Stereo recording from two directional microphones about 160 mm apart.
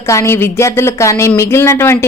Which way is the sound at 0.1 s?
15° left (ahead or behind).